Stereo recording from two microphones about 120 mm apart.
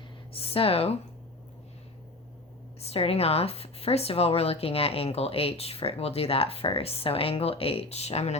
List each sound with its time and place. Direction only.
0.3 s speech: 50° left (ahead or behind)
2.8 s a woman's voice: 55° left (ahead or behind)